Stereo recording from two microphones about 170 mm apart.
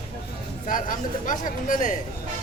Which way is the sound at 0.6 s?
50° left (ahead or behind).